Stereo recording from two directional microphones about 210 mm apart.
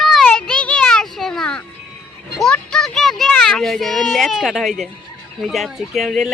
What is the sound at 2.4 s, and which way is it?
Children playing, 5° left (ahead or behind).